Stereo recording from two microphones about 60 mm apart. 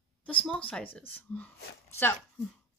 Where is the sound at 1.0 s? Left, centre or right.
Left.